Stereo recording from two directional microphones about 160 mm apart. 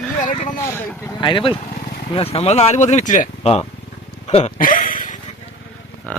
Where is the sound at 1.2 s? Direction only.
30° left (ahead or behind).